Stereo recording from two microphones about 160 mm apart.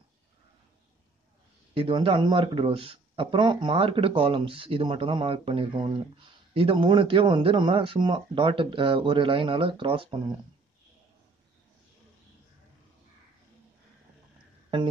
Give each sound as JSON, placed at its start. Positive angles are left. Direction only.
{"t": 1.7, "sound": "speech", "side_deg": -30}